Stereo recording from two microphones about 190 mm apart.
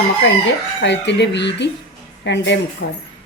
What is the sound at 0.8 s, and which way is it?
A woman's voice, 65° left (ahead or behind).